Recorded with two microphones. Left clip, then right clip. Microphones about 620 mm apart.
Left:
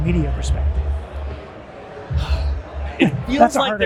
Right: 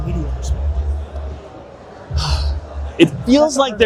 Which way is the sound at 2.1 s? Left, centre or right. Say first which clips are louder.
Right 8 dB; right.